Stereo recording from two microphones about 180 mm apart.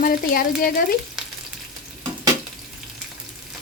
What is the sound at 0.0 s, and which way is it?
Speech, 55° left (ahead or behind).